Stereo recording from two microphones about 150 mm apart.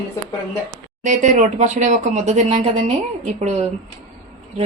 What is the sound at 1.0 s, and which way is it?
A woman's voice, 55° right (ahead or behind).